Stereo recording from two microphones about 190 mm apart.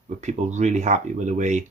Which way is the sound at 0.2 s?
40° right (ahead or behind).